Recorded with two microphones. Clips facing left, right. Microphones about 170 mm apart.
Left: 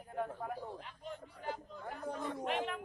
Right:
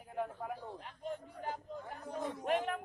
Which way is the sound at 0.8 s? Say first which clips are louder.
Right 4 dB; 45° right (ahead or behind).